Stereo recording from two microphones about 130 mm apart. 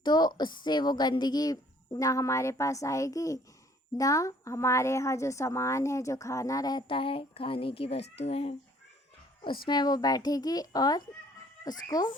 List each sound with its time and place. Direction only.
0.0 s a woman's voice: 35° left (ahead or behind)
9.4 s speech: 35° left (ahead or behind)